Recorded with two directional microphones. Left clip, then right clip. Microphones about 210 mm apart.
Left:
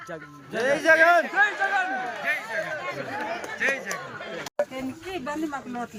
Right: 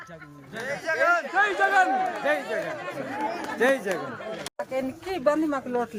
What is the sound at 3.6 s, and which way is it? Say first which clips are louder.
Speech: right 4 dB; 35° right (ahead or behind).